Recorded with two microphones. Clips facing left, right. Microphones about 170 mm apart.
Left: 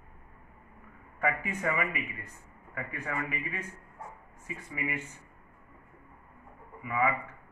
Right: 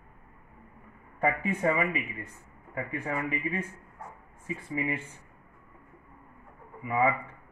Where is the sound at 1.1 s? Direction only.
30° right (ahead or behind).